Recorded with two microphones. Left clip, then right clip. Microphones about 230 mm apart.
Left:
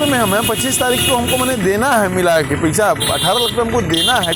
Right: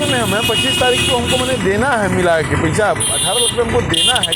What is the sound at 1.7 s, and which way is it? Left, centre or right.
Speech, left.